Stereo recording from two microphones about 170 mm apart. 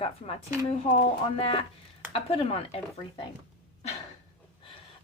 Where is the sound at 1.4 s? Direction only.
35° left (ahead or behind).